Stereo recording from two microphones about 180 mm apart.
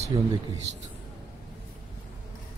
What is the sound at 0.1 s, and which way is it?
Speech, 25° right (ahead or behind).